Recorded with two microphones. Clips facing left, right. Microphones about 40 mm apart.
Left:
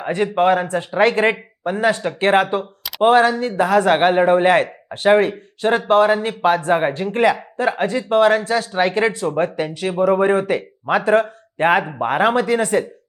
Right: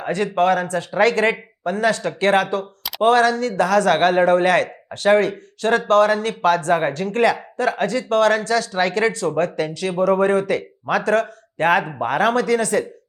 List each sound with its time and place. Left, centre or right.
0.1 s speech: centre